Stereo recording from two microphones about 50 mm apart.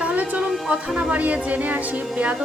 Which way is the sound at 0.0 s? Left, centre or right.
Right.